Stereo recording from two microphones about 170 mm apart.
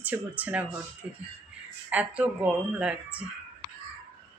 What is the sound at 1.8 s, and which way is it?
A woman's voice, 10° right (ahead or behind).